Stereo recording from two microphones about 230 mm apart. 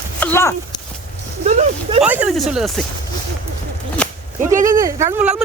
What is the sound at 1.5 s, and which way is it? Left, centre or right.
Speech, right.